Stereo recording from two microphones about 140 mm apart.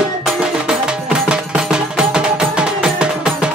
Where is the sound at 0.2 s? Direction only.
5° right (ahead or behind).